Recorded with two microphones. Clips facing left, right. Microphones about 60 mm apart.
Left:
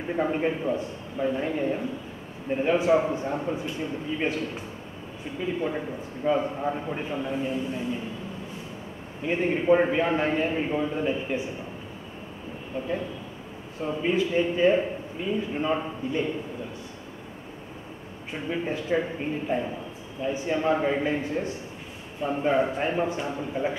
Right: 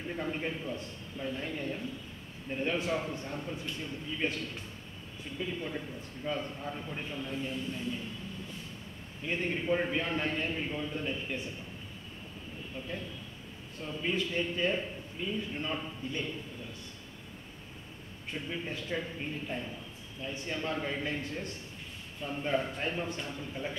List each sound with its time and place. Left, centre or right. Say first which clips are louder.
0.0 s a man's voice: left 10 dB; left
9.2 s a man's voice: left 8 dB; centre
12.7 s a man's voice: left 11 dB; left
14.1 s a man's voice: left 9 dB; centre
18.3 s a man's voice: left 8 dB; centre
22.2 s a man's voice: left 9 dB; left